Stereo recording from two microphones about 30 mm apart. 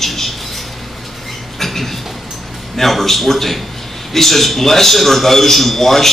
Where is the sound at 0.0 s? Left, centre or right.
Centre.